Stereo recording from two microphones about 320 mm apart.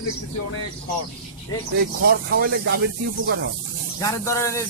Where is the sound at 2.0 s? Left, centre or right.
Right.